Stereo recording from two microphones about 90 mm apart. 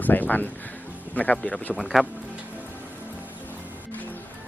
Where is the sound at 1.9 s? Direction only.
Centre (ahead or behind).